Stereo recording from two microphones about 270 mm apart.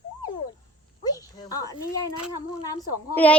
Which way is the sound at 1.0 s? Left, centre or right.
Centre.